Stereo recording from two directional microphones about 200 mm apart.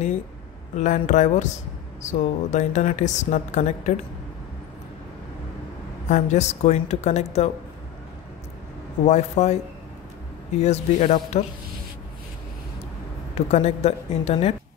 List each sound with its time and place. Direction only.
0.7 s a woman's voice: 35° left (ahead or behind)
6.0 s a woman's voice: 35° left (ahead or behind)
9.0 s a woman's voice: 35° left (ahead or behind)
10.6 s a woman's voice: 35° left (ahead or behind)
13.3 s a woman's voice: 35° left (ahead or behind)